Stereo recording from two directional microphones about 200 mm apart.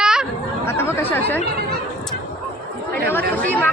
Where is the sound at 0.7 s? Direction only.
10° left (ahead or behind).